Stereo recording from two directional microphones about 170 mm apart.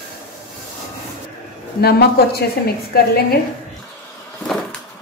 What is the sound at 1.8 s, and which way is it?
A woman's voice, 65° left (ahead or behind).